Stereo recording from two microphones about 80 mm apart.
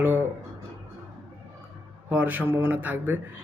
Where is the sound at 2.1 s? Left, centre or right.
Centre.